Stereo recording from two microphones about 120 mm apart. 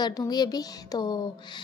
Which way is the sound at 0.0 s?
35° left (ahead or behind).